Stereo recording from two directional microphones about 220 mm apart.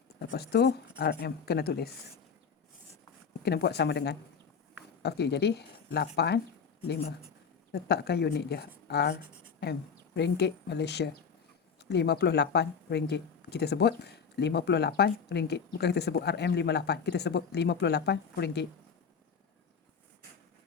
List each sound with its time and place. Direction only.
0.3 s speech: 45° left (ahead or behind)
3.4 s speech: 50° left (ahead or behind)
10.2 s speech: 50° left (ahead or behind)